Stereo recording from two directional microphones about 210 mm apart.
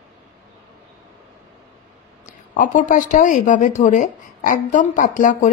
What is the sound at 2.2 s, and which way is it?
A woman's voice, 35° left (ahead or behind).